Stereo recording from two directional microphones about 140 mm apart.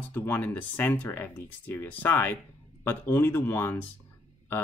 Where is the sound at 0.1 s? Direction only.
15° left (ahead or behind).